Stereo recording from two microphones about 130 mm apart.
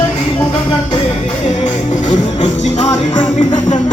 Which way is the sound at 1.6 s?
70° left (ahead or behind).